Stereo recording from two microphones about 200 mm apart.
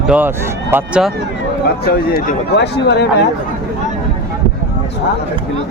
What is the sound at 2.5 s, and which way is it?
Speech, 60° left (ahead or behind).